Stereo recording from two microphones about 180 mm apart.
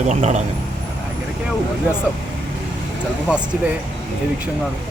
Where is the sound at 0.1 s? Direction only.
40° right (ahead or behind).